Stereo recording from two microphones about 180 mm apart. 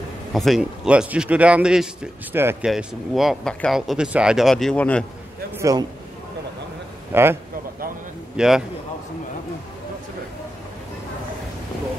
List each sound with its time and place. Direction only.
0.3 s speech: centre (ahead or behind)
5.6 s a man's voice: 20° right (ahead or behind)
7.1 s a man's voice: 15° right (ahead or behind)
8.4 s speech: 5° right (ahead or behind)